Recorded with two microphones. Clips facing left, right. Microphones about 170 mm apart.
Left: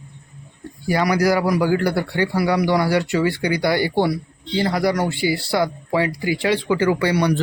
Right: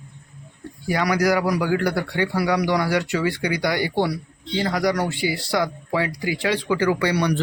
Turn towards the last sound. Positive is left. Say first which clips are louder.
# left 2 dB
turn(degrees=30)  # may be behind; listen again after turning